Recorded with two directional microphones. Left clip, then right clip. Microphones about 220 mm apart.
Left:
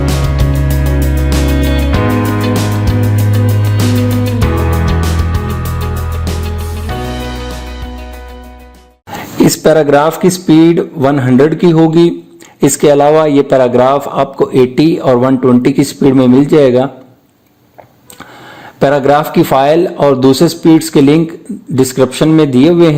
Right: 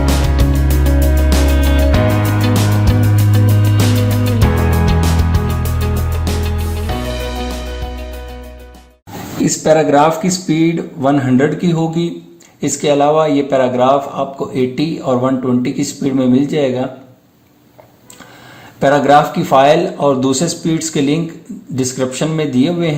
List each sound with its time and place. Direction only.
0.0 s music: centre (ahead or behind)
10.3 s a man's voice: 35° left (ahead or behind)
12.5 s a man's voice: 45° left (ahead or behind)
18.8 s a man's voice: 35° left (ahead or behind)